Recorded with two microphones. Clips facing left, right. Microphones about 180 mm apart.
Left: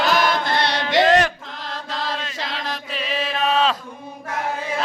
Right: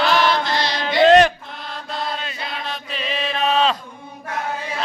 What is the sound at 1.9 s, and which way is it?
Chant, 90° left.